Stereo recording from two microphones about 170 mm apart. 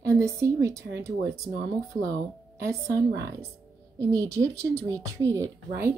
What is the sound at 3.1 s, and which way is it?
Speech, 85° right.